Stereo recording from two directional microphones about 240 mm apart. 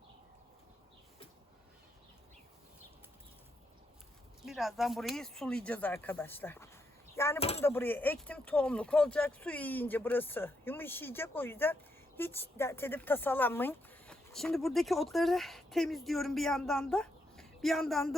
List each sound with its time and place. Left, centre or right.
4.4 s speech: centre
7.3 s a sound: left
7.6 s speech: centre